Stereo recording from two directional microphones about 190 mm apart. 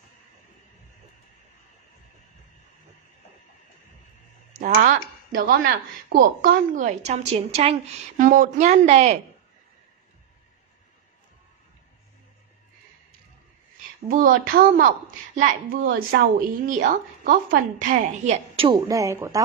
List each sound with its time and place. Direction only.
4.6 s a woman's voice: 45° right (ahead or behind)
14.0 s a woman's voice: 50° right (ahead or behind); by 18.8 s 30° right (ahead or behind)
18.9 s speech: 15° right (ahead or behind)